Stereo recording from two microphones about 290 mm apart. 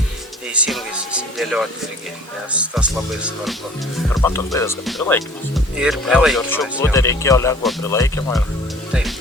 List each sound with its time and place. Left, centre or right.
0.5 s speech: centre
4.1 s speech: centre
8.9 s music: centre